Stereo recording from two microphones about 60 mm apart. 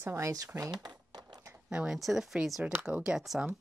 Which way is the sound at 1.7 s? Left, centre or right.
Centre.